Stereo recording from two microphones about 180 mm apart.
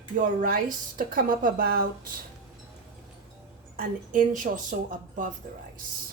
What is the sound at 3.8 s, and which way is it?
Speech, 50° right (ahead or behind).